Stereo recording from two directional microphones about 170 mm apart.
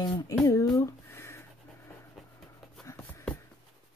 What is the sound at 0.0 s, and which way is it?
Speech, 25° left (ahead or behind).